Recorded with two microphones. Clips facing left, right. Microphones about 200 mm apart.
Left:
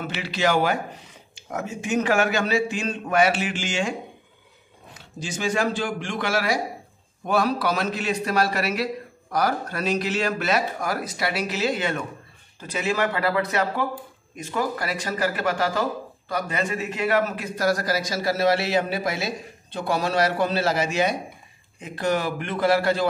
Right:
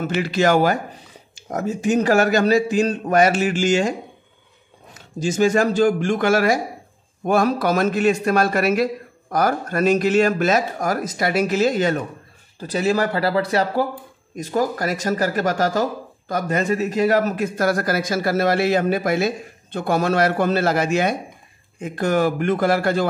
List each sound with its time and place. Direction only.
0.0 s a man's voice: 45° right (ahead or behind)
4.9 s a man's voice: 45° right (ahead or behind)